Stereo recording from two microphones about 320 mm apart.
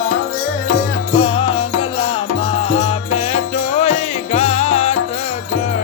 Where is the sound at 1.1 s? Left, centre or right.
Centre.